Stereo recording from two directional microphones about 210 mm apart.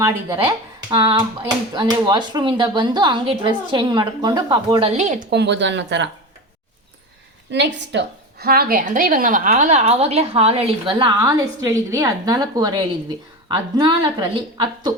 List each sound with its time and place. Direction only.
0.0 s a woman's voice: 15° right (ahead or behind); by 5.2 s 35° right (ahead or behind)
5.3 s speech: 55° right (ahead or behind)
7.5 s a woman's voice: 55° right (ahead or behind); by 14.9 s 25° right (ahead or behind)